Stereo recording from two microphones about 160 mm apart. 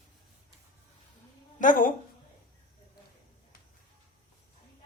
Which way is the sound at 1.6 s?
55° left (ahead or behind).